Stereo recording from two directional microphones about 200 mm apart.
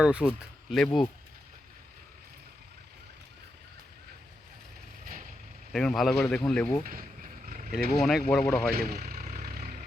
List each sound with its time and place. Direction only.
0.0 s a man's voice: 5° right (ahead or behind)
5.7 s a man's voice: centre (ahead or behind)
6.8 s vehicle: 45° right (ahead or behind)
8.0 s a man's voice: centre (ahead or behind)
8.7 s speech: 50° right (ahead or behind)
9.2 s vehicle: 45° right (ahead or behind)